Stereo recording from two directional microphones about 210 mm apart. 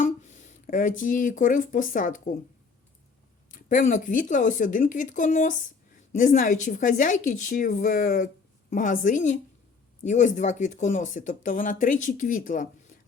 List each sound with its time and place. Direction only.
0.0 s speech: 35° left (ahead or behind)
3.5 s speech: 40° left (ahead or behind)